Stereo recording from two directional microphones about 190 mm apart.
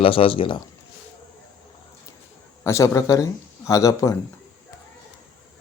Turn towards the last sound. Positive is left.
turn(degrees=15)  # may be behind; listen again after turning